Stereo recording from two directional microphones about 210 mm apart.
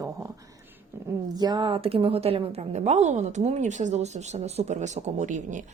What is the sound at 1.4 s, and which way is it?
A woman's voice, 20° right (ahead or behind).